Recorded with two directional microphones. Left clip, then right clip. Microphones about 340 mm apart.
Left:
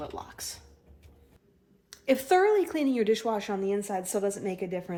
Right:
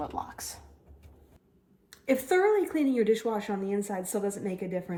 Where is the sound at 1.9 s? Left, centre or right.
Left.